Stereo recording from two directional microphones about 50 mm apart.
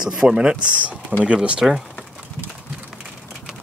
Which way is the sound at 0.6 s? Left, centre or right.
Right.